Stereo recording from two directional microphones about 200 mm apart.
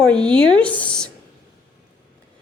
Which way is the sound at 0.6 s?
5° left (ahead or behind).